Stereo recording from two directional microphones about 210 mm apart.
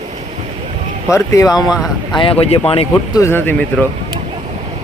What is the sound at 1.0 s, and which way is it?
Speech, 15° left (ahead or behind).